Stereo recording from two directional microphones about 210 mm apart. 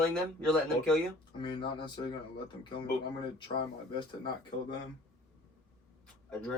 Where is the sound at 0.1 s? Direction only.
5° left (ahead or behind).